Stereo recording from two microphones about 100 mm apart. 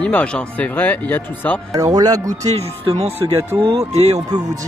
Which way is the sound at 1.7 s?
35° right (ahead or behind).